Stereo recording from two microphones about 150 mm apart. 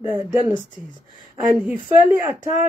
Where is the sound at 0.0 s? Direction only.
10° right (ahead or behind).